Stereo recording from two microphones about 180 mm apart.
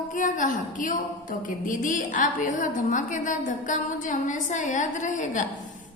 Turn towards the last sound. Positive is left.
turn(degrees=45)  # may be behind; listen again after turning